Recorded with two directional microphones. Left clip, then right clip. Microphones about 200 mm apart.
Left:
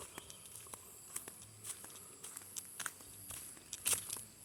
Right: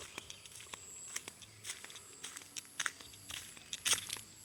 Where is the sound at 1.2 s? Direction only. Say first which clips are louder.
Right 6 dB; 5° left (ahead or behind).